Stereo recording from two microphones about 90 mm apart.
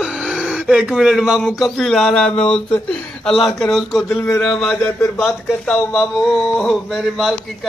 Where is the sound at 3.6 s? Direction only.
Centre (ahead or behind).